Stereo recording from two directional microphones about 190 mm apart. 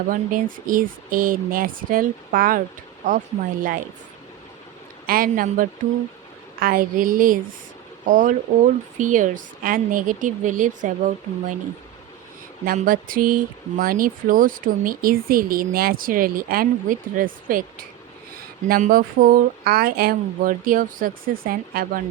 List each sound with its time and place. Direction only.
0.1 s speech: 45° right (ahead or behind)
5.0 s speech: 50° right (ahead or behind)
12.6 s speech: 45° right (ahead or behind)